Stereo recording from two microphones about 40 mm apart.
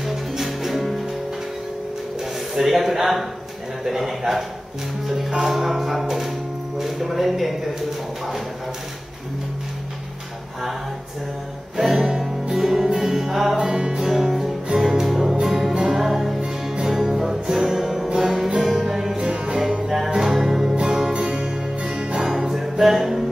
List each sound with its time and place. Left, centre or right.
0.0 s music: centre
2.5 s speech: centre
5.6 s church bell: centre
6.8 s speech: centre
11.7 s music: centre
13.6 s music: centre
20.7 s music: right
22.2 s music: centre